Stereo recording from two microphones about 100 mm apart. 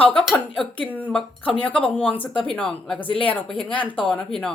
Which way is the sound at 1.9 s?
15° left (ahead or behind).